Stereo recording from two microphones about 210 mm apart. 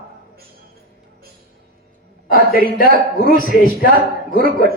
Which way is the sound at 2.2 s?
40° left (ahead or behind).